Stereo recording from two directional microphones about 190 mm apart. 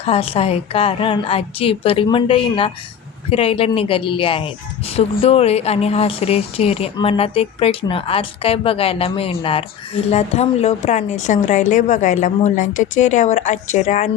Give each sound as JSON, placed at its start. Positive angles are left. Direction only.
{"t": 0.0, "sound": "a woman's voice", "side_deg": 30}